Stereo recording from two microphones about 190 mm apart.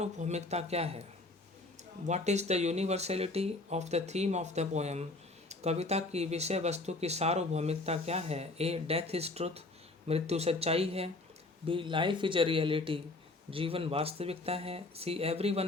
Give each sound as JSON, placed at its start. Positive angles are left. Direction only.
{"t": 0.0, "sound": "speech", "side_deg": -35}
{"t": 2.0, "sound": "speech", "side_deg": -35}